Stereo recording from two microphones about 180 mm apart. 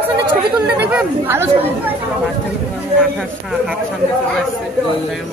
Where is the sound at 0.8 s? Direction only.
10° right (ahead or behind).